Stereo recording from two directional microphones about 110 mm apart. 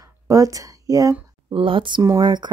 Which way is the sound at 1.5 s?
50° right (ahead or behind).